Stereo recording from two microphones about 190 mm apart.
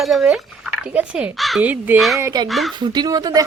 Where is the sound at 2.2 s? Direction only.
20° right (ahead or behind).